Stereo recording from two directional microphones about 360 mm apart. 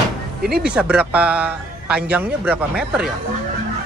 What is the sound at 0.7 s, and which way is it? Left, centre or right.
Speech, centre.